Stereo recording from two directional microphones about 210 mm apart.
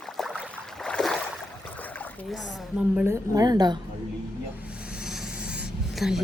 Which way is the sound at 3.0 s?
15° right (ahead or behind).